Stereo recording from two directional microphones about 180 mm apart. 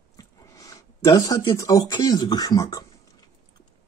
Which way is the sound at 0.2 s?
20° left (ahead or behind).